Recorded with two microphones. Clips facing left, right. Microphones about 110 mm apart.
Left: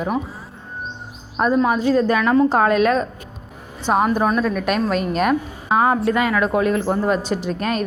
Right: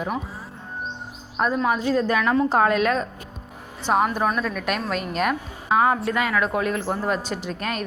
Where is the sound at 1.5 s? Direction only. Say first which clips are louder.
Left 6 dB; 25° left (ahead or behind).